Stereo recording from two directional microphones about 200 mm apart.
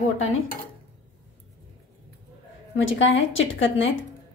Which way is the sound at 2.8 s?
70° left (ahead or behind).